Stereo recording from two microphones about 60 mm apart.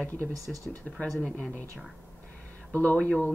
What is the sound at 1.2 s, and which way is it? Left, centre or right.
Speech, left.